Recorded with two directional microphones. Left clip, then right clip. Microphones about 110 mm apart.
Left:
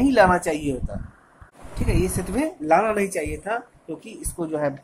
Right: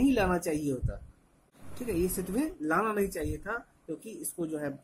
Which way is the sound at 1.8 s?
15° right (ahead or behind).